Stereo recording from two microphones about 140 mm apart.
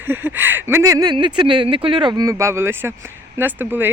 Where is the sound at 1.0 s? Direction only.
30° right (ahead or behind).